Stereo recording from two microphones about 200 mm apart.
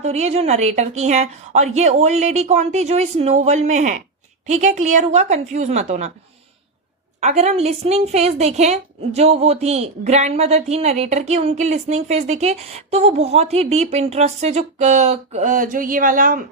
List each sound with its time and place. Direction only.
0.0 s a woman's voice: 35° right (ahead or behind)
7.2 s a woman's voice: 35° right (ahead or behind)